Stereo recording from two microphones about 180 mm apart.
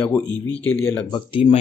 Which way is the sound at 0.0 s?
15° left (ahead or behind).